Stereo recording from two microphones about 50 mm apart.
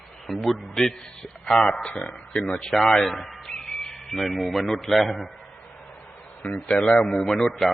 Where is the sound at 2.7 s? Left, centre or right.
Centre.